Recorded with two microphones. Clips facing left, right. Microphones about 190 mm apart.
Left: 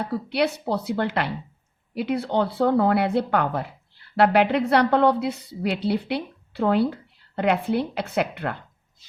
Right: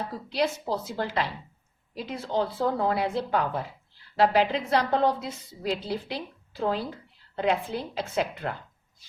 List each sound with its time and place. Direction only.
0.0 s speech: 65° left (ahead or behind)